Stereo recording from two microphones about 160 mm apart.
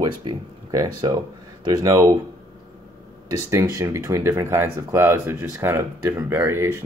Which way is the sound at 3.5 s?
20° right (ahead or behind).